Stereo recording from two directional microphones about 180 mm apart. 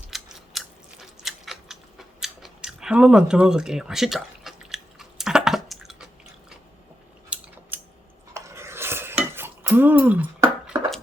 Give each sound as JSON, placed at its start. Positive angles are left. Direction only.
{"t": 0.1, "sound": "chewing", "side_deg": 0}
{"t": 0.5, "sound": "biting", "side_deg": 0}
{"t": 1.2, "sound": "chewing", "side_deg": 0}
{"t": 7.3, "sound": "scissors", "side_deg": -5}
{"t": 8.3, "sound": "stir", "side_deg": -15}